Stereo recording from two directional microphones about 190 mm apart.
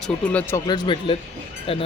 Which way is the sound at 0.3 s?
10° left (ahead or behind).